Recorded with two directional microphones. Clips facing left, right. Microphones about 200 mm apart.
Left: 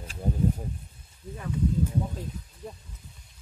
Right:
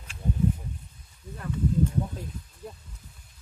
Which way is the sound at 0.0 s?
40° left (ahead or behind).